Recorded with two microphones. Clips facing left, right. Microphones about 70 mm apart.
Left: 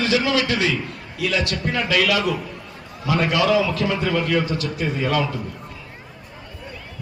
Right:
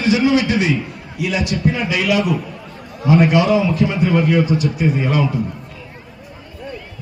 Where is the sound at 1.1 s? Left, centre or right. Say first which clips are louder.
Right 3 dB; centre.